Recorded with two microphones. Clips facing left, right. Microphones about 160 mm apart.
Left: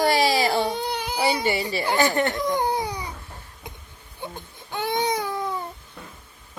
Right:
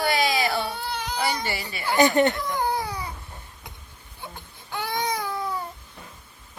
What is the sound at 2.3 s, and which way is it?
Baby cry, 20° left (ahead or behind).